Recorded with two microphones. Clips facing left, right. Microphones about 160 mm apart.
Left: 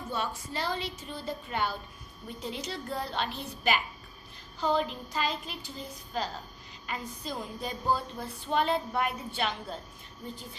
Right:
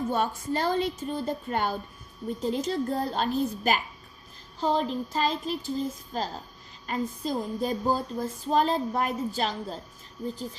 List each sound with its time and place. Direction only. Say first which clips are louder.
0.1 s a woman's voice: right 7 dB; 45° right (ahead or behind)